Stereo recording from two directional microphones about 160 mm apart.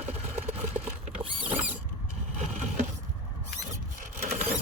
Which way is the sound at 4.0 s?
60° right (ahead or behind).